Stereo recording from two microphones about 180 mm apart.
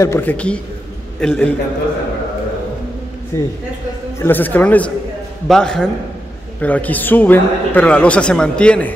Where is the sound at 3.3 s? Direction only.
15° left (ahead or behind).